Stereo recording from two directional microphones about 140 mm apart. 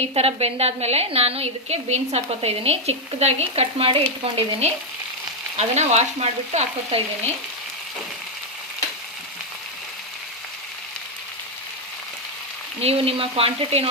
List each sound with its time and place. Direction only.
0.0 s a woman's voice: 45° right (ahead or behind)
12.8 s a woman's voice: 45° right (ahead or behind)